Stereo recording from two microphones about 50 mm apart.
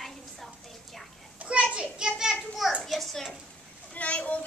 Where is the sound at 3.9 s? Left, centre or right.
Left.